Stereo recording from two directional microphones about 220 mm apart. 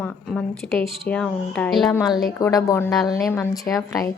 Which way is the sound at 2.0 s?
20° left (ahead or behind).